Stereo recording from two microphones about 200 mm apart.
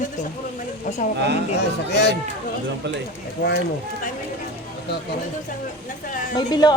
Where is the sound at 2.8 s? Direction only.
60° right (ahead or behind).